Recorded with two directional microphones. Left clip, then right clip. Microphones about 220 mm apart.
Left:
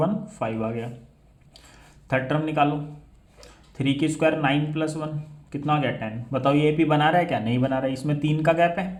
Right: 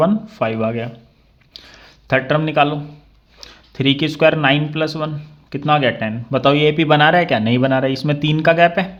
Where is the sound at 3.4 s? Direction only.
40° right (ahead or behind).